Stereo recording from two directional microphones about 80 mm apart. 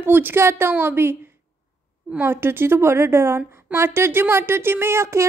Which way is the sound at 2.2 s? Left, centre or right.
Right.